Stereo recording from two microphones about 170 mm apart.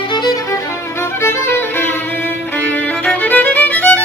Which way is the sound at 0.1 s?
25° left (ahead or behind).